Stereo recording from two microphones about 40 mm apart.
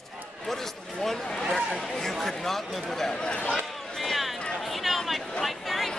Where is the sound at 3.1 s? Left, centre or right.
Centre.